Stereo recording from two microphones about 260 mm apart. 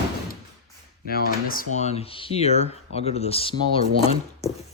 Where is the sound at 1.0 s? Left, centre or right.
Left.